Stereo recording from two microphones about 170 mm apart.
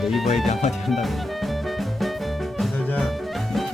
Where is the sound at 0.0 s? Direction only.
Centre (ahead or behind).